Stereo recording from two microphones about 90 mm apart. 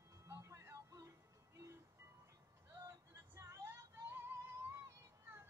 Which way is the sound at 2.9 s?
35° right (ahead or behind).